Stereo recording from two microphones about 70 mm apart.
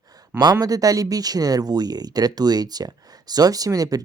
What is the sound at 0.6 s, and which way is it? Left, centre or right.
Speech, right.